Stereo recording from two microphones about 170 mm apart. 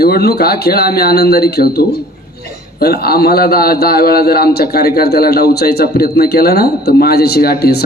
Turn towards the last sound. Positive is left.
turn(degrees=65)  # may be behind; listen again after turning